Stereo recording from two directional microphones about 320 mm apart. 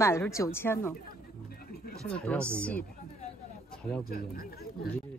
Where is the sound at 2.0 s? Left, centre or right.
Centre.